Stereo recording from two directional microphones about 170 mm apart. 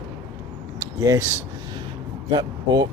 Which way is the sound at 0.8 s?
15° right (ahead or behind).